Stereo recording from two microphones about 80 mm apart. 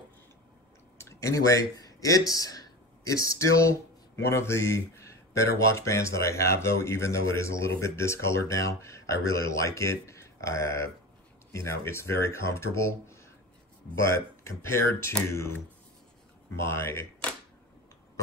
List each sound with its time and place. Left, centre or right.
0.9 s speech: left
16.5 s speech: left